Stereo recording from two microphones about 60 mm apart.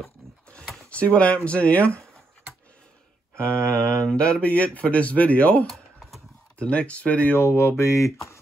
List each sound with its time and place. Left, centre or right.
0.7 s speech: left
3.3 s speech: left
5.7 s typing: centre
6.6 s speech: left
7.3 s speech: left